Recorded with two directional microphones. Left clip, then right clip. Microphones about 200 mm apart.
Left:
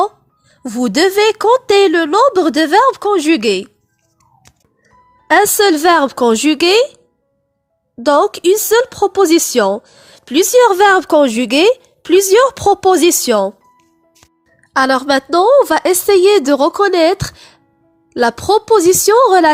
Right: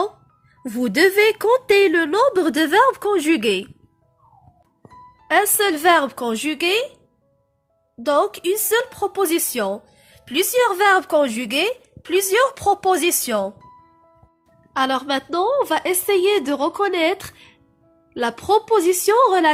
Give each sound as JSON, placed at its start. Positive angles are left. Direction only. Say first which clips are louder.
{"t": 0.6, "sound": "speech", "louder": "left 4 dB", "side_deg": 40}
{"t": 5.3, "sound": "a woman's voice", "louder": "left 8 dB", "side_deg": 40}
{"t": 8.0, "sound": "a woman's voice", "louder": "left 8 dB", "side_deg": 45}
{"t": 14.7, "sound": "a woman's voice", "louder": "left 8 dB", "side_deg": 45}